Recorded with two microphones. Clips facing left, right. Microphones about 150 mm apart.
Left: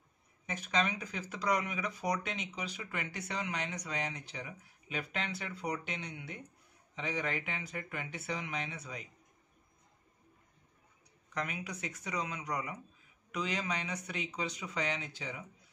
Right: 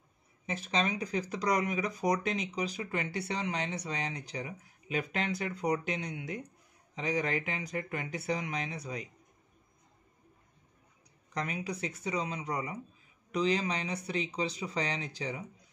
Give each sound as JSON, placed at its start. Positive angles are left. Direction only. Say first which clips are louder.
{"t": 0.5, "sound": "speech", "louder": "right 2 dB", "side_deg": -30}
{"t": 11.3, "sound": "speech", "louder": "right 3 dB", "side_deg": -35}